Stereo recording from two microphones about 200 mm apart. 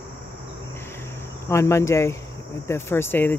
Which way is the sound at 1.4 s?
15° left (ahead or behind).